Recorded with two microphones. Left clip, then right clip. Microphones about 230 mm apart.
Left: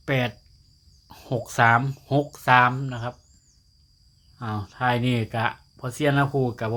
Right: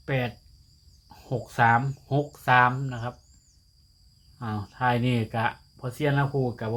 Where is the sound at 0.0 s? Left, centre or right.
Left.